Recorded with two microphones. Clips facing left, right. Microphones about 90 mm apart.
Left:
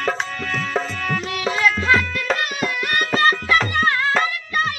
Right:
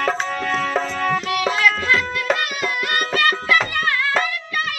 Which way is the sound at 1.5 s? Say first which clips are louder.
Left 2 dB; 30° left (ahead or behind).